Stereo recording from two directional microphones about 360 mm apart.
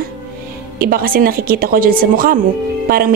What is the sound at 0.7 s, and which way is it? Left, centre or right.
Speech, right.